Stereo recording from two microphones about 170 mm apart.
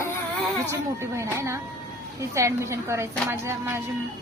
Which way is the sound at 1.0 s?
15° right (ahead or behind).